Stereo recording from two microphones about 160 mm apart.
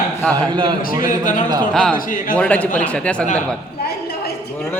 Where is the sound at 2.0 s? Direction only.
60° left (ahead or behind).